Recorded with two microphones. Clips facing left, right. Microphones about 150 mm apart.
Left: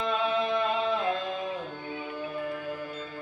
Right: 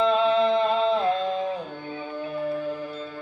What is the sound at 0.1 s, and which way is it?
Music, 25° right (ahead or behind).